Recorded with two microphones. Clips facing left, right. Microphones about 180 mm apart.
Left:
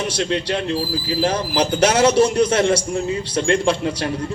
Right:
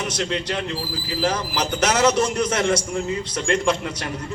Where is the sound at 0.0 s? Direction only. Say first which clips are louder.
Left 4 dB; 30° left (ahead or behind).